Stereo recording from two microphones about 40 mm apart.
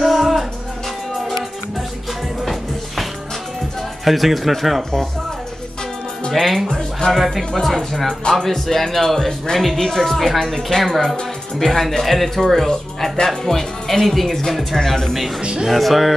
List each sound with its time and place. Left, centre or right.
0.0 s music: centre
4.0 s speech: centre
6.4 s speech: centre
8.2 s speech: centre